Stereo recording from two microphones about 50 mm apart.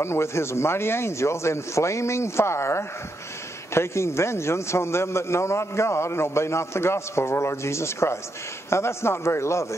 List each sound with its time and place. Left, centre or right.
0.0 s a man's voice: left